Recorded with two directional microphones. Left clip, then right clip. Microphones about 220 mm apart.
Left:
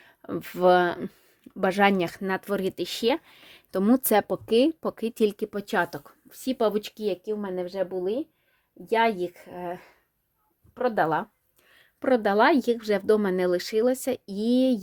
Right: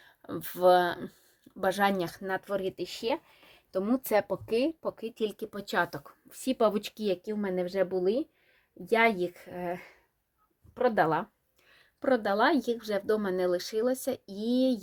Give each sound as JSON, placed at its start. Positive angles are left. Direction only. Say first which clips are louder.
{"t": 0.2, "sound": "speech", "louder": "left 3 dB", "side_deg": 40}
{"t": 6.1, "sound": "speech", "louder": "left 2 dB", "side_deg": 10}
{"t": 11.7, "sound": "speech", "louder": "left 4 dB", "side_deg": 35}